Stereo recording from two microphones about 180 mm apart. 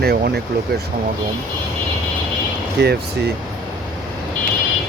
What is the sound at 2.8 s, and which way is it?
Speech, 65° right (ahead or behind).